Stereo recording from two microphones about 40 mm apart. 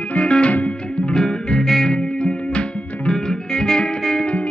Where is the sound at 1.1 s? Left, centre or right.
Centre.